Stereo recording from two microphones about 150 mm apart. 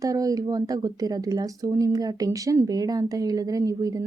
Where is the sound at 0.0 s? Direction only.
25° right (ahead or behind).